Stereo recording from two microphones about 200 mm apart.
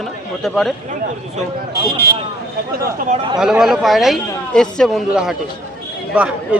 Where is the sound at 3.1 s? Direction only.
30° right (ahead or behind).